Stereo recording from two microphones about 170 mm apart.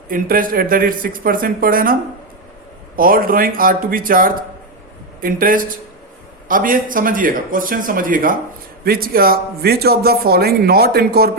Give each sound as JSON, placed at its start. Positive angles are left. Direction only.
{"t": 0.1, "sound": "a man's voice", "side_deg": -55}